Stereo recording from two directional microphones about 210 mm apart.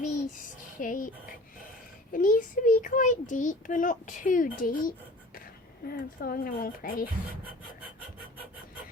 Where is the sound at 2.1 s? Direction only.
40° left (ahead or behind).